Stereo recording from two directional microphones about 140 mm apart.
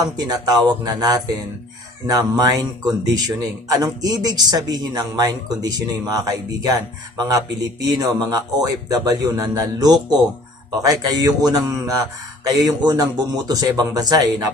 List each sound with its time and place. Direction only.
0.0 s a man's voice: 30° right (ahead or behind)